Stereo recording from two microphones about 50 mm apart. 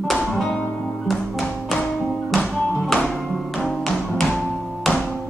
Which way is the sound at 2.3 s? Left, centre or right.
Centre.